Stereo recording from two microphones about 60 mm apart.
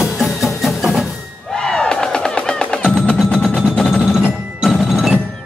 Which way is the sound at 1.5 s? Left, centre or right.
Centre.